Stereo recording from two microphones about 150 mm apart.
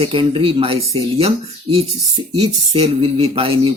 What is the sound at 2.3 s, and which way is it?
Speech, 40° right (ahead or behind).